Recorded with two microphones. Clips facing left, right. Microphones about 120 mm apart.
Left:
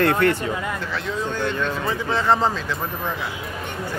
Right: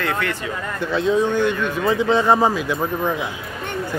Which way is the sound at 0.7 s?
15° right (ahead or behind).